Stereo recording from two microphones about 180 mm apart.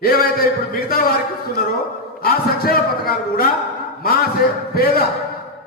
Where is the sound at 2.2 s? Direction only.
55° left (ahead or behind).